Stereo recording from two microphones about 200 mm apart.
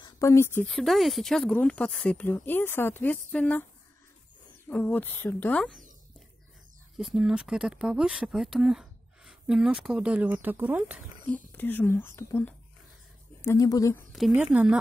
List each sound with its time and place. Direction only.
0.0 s speech: 15° left (ahead or behind)
4.6 s speech: 5° left (ahead or behind)
7.0 s speech: centre (ahead or behind)
11.5 s speech: 10° left (ahead or behind)
14.1 s speech: centre (ahead or behind)